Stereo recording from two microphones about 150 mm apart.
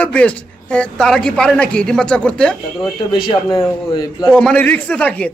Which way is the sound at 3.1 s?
35° left (ahead or behind).